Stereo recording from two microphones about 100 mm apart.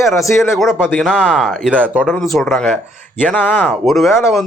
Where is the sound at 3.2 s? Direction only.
15° left (ahead or behind).